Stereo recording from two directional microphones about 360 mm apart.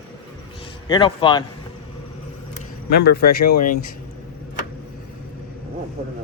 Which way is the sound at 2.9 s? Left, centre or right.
Left.